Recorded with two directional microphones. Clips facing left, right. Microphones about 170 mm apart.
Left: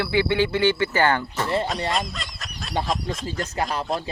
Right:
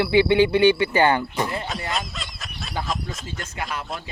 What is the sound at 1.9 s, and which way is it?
Goose, centre (ahead or behind).